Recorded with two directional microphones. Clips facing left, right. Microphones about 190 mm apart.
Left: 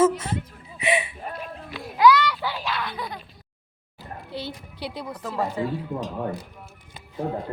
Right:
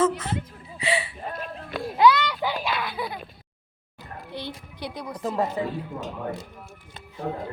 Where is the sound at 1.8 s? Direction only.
25° right (ahead or behind); by 3.2 s 10° right (ahead or behind).